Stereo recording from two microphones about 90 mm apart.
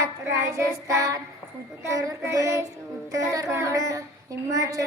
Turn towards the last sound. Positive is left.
turn(degrees=-40)  # may be behind; listen again after turning